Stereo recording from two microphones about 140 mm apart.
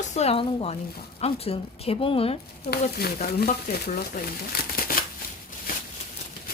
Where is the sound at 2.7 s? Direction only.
90° left.